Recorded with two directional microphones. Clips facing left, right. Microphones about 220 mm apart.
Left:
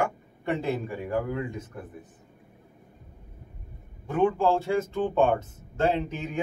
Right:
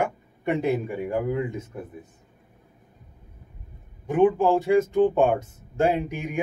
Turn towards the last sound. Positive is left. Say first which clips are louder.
# right 2 dB
turn(degrees=-15)  # may be behind; listen again after turning